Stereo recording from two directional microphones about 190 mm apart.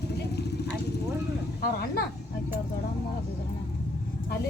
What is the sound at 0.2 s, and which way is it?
Vehicle, 60° left (ahead or behind).